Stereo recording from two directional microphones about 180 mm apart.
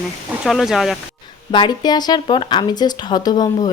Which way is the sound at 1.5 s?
25° left (ahead or behind).